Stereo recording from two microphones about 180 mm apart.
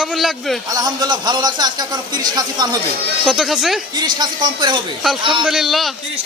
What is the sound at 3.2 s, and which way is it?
Speech, centre (ahead or behind).